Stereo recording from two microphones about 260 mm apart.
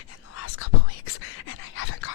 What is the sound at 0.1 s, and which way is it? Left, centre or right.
Whispering, left.